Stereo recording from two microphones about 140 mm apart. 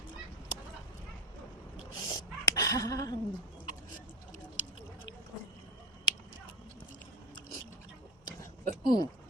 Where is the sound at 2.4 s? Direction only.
25° left (ahead or behind).